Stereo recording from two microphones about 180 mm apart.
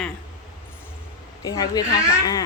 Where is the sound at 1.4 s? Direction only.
20° left (ahead or behind).